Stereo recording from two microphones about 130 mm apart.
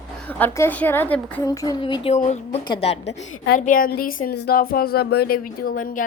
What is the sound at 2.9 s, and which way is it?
A woman's voice, 55° left (ahead or behind).